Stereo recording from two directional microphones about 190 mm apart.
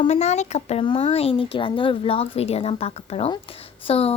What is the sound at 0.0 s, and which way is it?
A woman's voice, 35° left (ahead or behind).